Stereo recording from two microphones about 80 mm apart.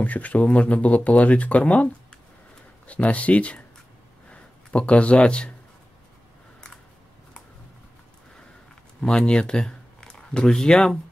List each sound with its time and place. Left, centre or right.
0.0 s speech: centre
2.9 s speech: centre
9.0 s speech: centre